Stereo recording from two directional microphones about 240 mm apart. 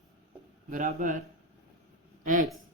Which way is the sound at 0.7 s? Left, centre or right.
Right.